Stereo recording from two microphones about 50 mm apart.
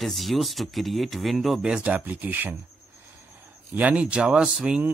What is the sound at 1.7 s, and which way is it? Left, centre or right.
Speech, right.